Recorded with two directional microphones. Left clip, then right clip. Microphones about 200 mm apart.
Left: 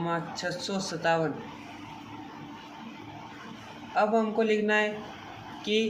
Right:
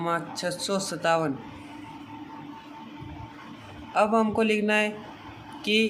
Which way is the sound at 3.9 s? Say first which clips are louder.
Right 3 dB; 30° right (ahead or behind).